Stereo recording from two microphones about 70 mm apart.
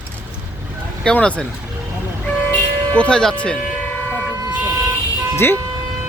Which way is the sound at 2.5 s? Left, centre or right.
Centre.